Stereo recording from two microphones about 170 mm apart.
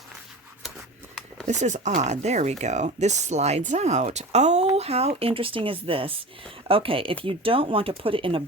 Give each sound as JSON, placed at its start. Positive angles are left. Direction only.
{"t": 1.5, "sound": "speech", "side_deg": -45}